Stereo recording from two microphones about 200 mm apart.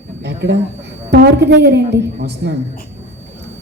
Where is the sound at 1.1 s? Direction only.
55° right (ahead or behind).